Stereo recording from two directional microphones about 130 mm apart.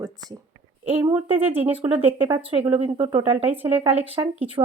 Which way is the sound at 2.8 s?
45° right (ahead or behind).